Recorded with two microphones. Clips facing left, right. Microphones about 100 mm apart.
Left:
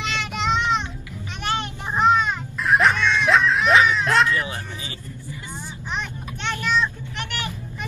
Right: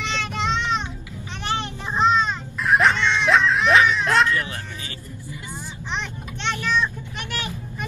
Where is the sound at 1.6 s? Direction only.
20° left (ahead or behind).